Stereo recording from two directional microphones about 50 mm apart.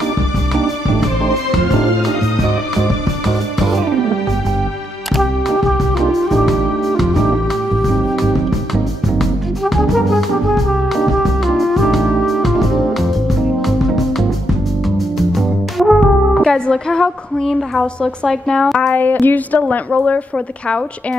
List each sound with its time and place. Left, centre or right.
1.0 s music: centre
5.1 s music: centre
15.1 s music: centre
16.4 s a sound: centre
18.9 s a woman's voice: left